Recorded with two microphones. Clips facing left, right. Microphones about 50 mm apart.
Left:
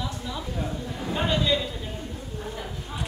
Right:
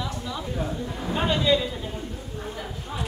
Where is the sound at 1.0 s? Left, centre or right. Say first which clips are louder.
Right 2 dB; centre.